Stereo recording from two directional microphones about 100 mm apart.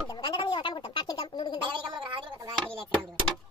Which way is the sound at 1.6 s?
55° right (ahead or behind).